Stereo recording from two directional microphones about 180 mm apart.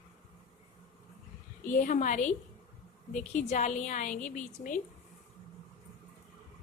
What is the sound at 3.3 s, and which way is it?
A woman's voice, 40° left (ahead or behind).